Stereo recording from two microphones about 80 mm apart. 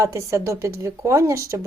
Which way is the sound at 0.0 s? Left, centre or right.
Right.